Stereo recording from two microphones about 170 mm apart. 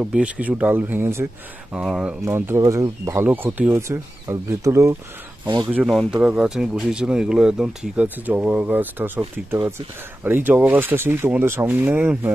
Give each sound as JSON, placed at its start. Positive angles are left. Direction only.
{"t": 0.0, "sound": "speech", "side_deg": -5}